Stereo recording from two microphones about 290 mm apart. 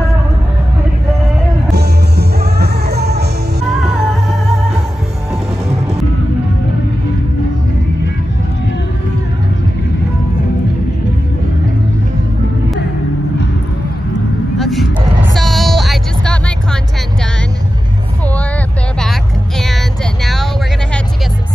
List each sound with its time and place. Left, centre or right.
1.7 s music: right
3.8 s music: centre
14.6 s a sound: centre
15.3 s music: centre